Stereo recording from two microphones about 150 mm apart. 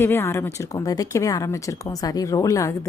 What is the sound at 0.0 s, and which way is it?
A woman's voice, 15° left (ahead or behind).